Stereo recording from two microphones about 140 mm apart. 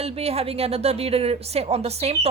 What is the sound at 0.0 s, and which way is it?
Speech, 45° right (ahead or behind).